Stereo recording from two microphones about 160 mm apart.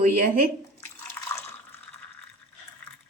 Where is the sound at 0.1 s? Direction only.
70° right (ahead or behind).